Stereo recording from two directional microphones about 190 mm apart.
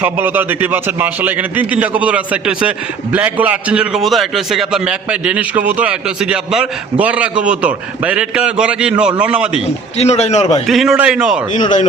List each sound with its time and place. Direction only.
0.0 s a man's voice: 10° right (ahead or behind)
10.0 s a man's voice: 35° left (ahead or behind)
10.7 s a man's voice: centre (ahead or behind)